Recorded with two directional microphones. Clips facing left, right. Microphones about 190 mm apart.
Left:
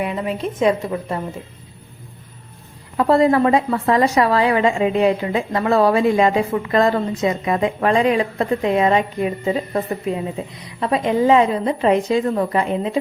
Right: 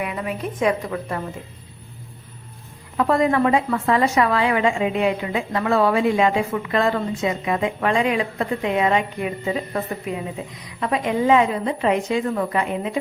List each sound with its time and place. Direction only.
0.0 s a woman's voice: 25° left (ahead or behind)
3.0 s a woman's voice: 35° left (ahead or behind)